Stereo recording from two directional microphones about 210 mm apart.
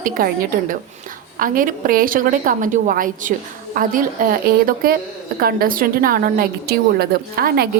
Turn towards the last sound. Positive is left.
turn(degrees=-45)  # may be behind; listen again after turning